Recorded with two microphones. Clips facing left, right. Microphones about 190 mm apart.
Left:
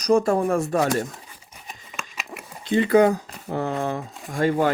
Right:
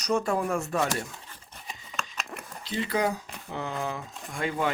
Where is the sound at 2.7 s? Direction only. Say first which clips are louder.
Left 11 dB; 55° left (ahead or behind).